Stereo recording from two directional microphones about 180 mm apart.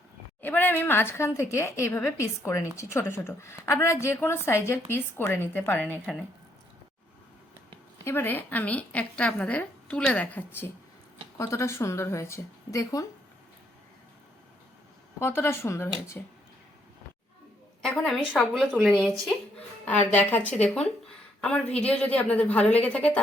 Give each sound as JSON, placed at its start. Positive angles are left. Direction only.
{"t": 0.4, "sound": "speech", "side_deg": 10}
{"t": 8.0, "sound": "speech", "side_deg": 10}
{"t": 15.2, "sound": "speech", "side_deg": 15}
{"t": 17.8, "sound": "a woman's voice", "side_deg": 0}